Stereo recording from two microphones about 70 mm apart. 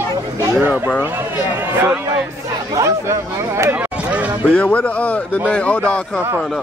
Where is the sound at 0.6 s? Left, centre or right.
Right.